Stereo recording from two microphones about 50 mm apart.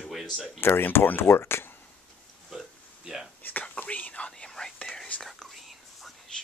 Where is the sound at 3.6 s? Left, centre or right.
Left.